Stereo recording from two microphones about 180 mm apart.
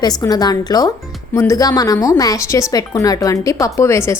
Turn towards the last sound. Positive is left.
turn(degrees=15)  # may be behind; listen again after turning